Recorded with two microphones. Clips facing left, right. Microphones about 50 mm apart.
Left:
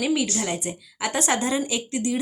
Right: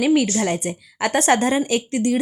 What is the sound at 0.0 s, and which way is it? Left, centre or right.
A woman's voice, right.